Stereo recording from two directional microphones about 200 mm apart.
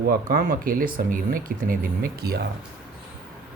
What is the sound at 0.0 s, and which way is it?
Speech, 45° right (ahead or behind).